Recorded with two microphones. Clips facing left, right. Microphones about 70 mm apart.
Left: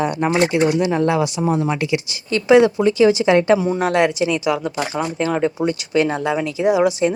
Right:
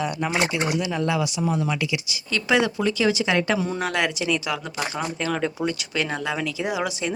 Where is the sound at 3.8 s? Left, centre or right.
Left.